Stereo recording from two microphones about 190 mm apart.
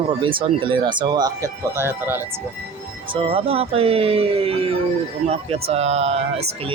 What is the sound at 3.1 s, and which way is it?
Speech, 30° right (ahead or behind).